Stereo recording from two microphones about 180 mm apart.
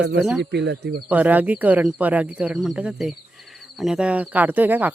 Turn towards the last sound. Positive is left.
turn(degrees=-10)  # may be behind; listen again after turning